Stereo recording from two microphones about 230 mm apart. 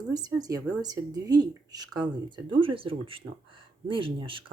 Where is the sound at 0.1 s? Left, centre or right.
Centre.